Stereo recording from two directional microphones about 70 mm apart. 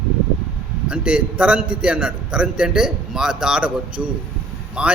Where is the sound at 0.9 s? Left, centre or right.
Centre.